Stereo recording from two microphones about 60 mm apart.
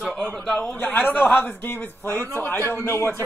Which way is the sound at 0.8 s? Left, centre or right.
Left.